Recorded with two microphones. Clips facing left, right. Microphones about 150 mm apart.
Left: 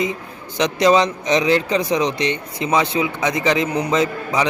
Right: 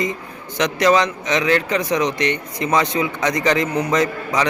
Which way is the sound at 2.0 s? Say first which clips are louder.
Even; 30° left (ahead or behind).